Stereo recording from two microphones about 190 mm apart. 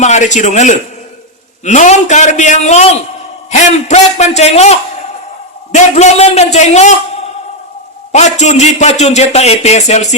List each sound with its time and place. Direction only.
0.0 s a man's voice: 40° left (ahead or behind)
8.1 s a man's voice: 40° left (ahead or behind)